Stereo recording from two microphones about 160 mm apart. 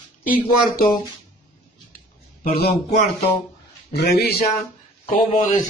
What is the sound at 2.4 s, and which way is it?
Speech, 80° left.